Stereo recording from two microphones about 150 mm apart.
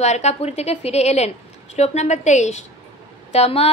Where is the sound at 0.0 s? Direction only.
50° left (ahead or behind).